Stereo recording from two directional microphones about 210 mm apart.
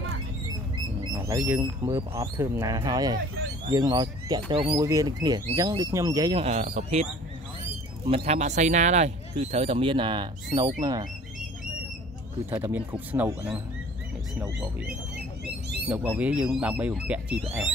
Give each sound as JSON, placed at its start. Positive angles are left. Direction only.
{"t": 1.1, "sound": "speech", "side_deg": -15}
{"t": 8.1, "sound": "speech", "side_deg": -30}
{"t": 12.4, "sound": "speech", "side_deg": -10}
{"t": 15.9, "sound": "speech", "side_deg": -5}